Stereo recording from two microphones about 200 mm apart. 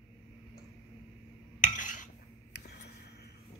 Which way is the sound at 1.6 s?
40° left (ahead or behind).